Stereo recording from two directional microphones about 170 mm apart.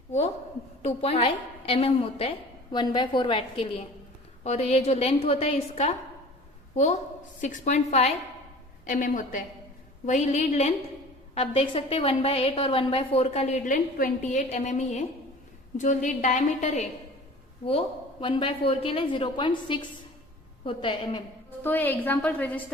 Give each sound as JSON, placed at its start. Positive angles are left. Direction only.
{"t": 0.8, "sound": "a woman's voice", "side_deg": 35}
{"t": 8.9, "sound": "a woman's voice", "side_deg": 50}
{"t": 17.7, "sound": "a woman's voice", "side_deg": 30}
{"t": 21.6, "sound": "a woman's voice", "side_deg": 10}